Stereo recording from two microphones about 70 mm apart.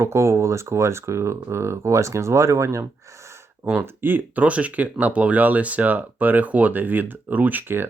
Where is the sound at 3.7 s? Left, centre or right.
Right.